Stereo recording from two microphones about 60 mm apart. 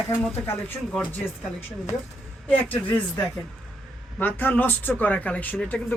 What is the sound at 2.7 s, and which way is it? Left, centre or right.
Speech, left.